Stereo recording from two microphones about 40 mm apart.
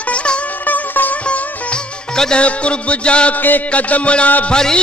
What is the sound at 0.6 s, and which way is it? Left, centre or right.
Music, left.